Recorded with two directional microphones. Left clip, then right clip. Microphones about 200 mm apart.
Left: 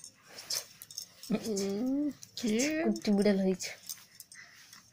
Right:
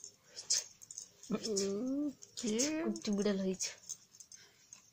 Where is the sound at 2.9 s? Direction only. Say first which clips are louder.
Left 7 dB; 10° left (ahead or behind).